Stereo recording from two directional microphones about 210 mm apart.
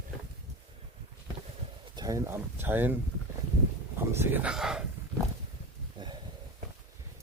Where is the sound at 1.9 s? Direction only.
15° right (ahead or behind).